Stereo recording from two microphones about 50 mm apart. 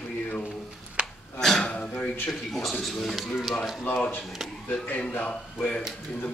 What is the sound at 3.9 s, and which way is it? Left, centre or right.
Speech, left.